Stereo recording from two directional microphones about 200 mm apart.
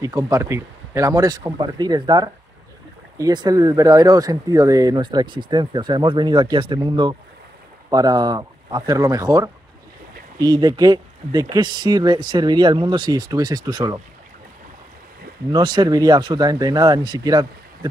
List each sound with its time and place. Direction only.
0.0 s speech: 15° right (ahead or behind)
15.5 s speech: 20° right (ahead or behind)